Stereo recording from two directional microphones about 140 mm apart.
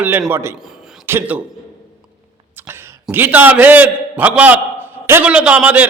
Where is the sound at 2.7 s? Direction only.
15° right (ahead or behind).